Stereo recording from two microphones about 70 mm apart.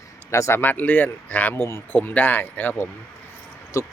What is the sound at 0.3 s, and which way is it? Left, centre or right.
Speech, left.